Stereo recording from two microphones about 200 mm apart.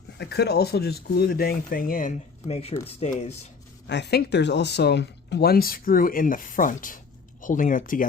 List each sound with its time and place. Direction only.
0.2 s speech: 55° left (ahead or behind); by 3.3 s 35° left (ahead or behind)
3.8 s speech: 55° left (ahead or behind)